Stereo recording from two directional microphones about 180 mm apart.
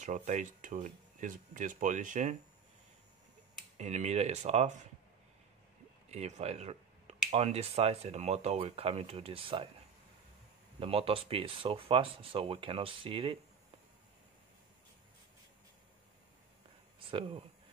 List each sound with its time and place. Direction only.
0.0 s speech: 40° right (ahead or behind)
3.7 s speech: 40° right (ahead or behind)
6.0 s speech: 40° right (ahead or behind)
10.8 s speech: 30° right (ahead or behind)